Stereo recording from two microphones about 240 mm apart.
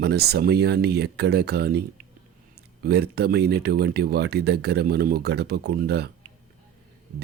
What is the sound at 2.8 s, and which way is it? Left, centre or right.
Speech, right.